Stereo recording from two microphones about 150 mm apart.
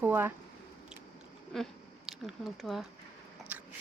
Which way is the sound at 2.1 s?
Centre (ahead or behind).